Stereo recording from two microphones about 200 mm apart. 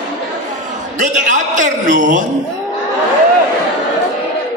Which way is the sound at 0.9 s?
40° right (ahead or behind).